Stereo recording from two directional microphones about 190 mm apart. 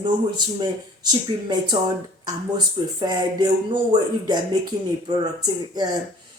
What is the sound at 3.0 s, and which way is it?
Speech, 20° right (ahead or behind).